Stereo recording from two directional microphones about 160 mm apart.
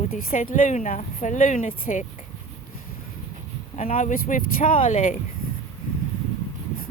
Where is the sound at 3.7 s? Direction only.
50° left (ahead or behind).